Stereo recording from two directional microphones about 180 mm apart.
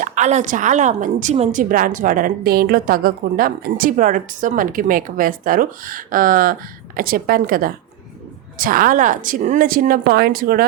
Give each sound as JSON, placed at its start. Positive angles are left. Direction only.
{"t": 0.0, "sound": "a woman's voice", "side_deg": -40}